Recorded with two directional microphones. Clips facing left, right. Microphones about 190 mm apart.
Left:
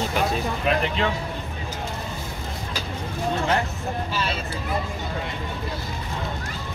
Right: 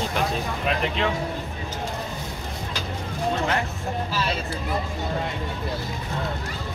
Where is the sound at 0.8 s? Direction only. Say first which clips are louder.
Even; centre (ahead or behind).